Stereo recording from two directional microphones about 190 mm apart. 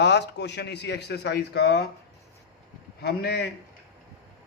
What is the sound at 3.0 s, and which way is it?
Speech, 60° left (ahead or behind).